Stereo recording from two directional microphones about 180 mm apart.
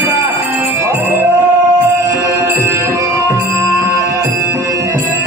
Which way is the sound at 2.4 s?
15° right (ahead or behind).